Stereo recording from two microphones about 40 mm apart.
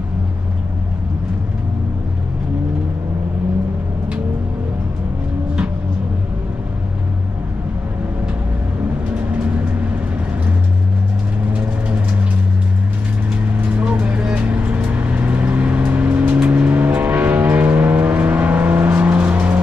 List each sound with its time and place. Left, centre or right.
9.1 s vehicle: right
13.5 s vehicle: right